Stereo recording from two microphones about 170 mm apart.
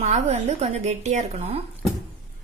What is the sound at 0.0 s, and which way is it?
A woman's voice, 40° right (ahead or behind).